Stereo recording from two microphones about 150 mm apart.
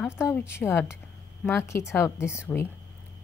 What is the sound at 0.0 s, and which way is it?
A woman's voice, 15° left (ahead or behind).